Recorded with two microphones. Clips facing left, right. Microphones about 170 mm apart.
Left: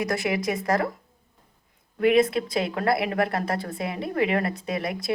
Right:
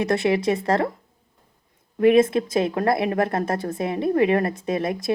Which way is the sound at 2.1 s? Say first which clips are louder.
Right 3 dB; 20° right (ahead or behind).